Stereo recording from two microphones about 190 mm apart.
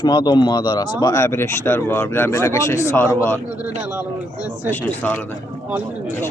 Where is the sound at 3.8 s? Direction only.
5° right (ahead or behind).